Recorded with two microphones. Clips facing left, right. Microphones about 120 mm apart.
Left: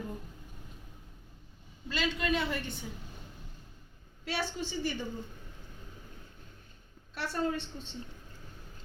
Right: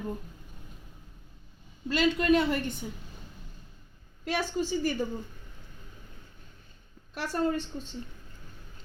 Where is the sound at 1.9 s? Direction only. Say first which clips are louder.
Right 8 dB; 50° right (ahead or behind).